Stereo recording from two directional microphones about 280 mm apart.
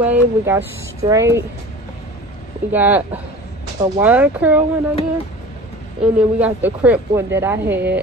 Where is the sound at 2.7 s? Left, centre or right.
Centre.